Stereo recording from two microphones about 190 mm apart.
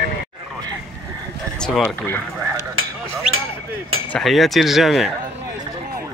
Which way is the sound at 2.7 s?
90° right.